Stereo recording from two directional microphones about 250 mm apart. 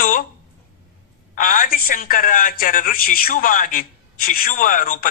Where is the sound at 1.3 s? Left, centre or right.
Left.